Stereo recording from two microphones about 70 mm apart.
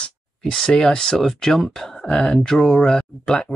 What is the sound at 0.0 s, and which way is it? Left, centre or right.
Speech, centre.